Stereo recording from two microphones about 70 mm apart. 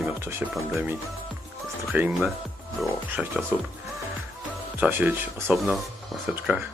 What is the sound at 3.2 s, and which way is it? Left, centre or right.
Speech, centre.